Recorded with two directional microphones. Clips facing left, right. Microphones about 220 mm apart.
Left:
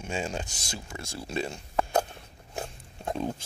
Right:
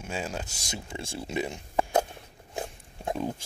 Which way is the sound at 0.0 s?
5° right (ahead or behind).